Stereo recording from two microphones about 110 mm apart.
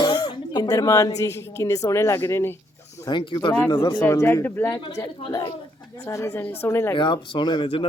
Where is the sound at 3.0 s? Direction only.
45° left (ahead or behind).